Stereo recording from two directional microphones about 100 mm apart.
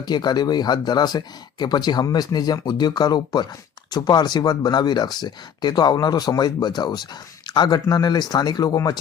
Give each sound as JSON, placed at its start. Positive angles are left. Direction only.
{"t": 0.0, "sound": "speech", "side_deg": 45}